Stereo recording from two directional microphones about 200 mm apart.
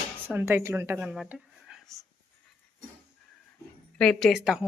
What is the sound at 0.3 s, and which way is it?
A woman's voice, 10° right (ahead or behind).